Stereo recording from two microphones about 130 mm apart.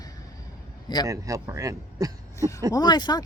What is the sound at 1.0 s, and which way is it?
Speech, 25° right (ahead or behind).